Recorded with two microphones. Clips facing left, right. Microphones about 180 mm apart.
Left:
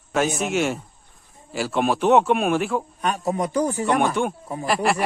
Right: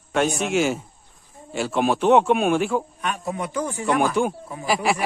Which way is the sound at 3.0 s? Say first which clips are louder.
Left 4 dB; 40° left (ahead or behind).